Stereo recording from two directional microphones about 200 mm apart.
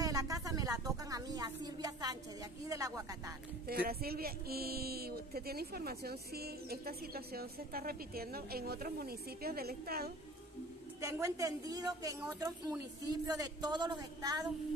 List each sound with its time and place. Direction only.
0.0 s a sound: 15° right (ahead or behind)
2.7 s a woman's voice: 15° right (ahead or behind)
3.6 s speech: 50° right (ahead or behind)
11.0 s a woman's voice: 15° right (ahead or behind)